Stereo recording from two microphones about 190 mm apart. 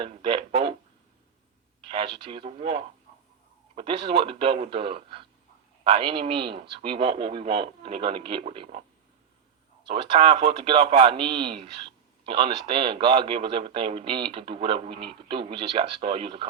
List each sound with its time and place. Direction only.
0.0 s speech: 25° right (ahead or behind)
1.8 s speech: 25° right (ahead or behind)
9.8 s speech: 25° right (ahead or behind)